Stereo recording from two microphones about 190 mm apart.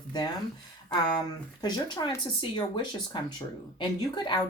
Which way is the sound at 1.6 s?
20° left (ahead or behind).